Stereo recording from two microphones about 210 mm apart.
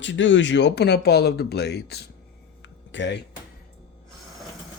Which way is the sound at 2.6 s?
60° left (ahead or behind).